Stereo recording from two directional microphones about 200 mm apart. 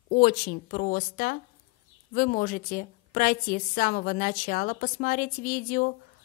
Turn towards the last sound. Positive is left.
turn(degrees=45)  # may be behind; listen again after turning